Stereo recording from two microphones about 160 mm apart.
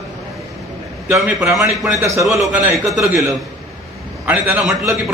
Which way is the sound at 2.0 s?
20° right (ahead or behind).